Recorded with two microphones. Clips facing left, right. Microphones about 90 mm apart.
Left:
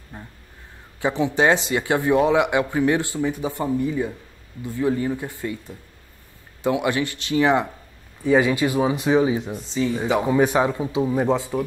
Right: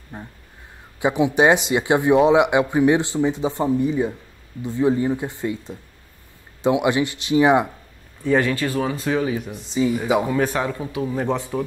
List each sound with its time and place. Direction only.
0.1 s speech: 20° right (ahead or behind)
8.2 s speech: 10° left (ahead or behind)
9.7 s speech: 15° right (ahead or behind)
10.2 s speech: 15° left (ahead or behind)
11.3 s speech: 5° left (ahead or behind)